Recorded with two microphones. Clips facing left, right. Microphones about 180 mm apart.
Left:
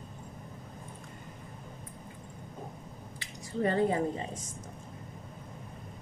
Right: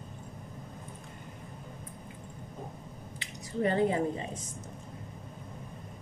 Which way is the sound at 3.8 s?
25° right (ahead or behind).